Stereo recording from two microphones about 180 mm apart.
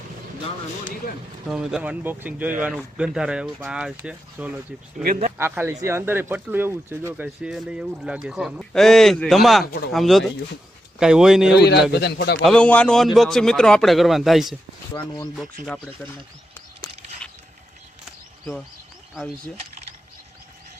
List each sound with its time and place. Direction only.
1.5 s speech: 5° right (ahead or behind)
11.5 s a man's voice: 70° left (ahead or behind)
12.4 s speech: 5° left (ahead or behind)
15.6 s speech: 5° left (ahead or behind)
16.8 s a sound: 20° left (ahead or behind)